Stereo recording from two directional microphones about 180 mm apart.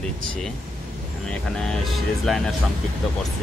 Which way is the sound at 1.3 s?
5° left (ahead or behind).